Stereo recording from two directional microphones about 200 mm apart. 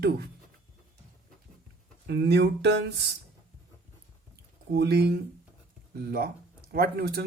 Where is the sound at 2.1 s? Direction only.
55° right (ahead or behind).